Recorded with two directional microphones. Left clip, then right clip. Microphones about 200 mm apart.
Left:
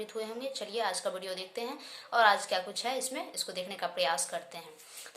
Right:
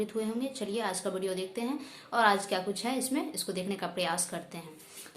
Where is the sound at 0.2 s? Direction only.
5° left (ahead or behind).